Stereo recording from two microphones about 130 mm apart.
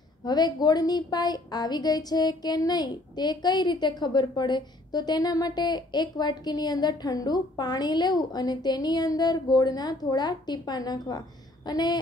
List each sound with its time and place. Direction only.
0.2 s a woman's voice: 30° left (ahead or behind)